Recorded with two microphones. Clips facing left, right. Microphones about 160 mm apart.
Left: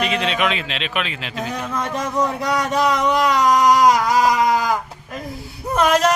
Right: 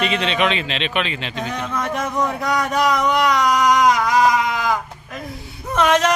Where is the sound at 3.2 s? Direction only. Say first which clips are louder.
Left 3 dB; 35° left (ahead or behind).